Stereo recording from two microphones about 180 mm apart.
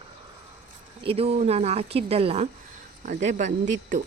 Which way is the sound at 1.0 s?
35° right (ahead or behind).